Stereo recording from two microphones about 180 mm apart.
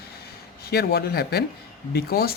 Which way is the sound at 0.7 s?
60° left (ahead or behind).